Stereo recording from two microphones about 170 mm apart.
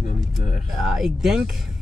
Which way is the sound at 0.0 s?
55° left (ahead or behind).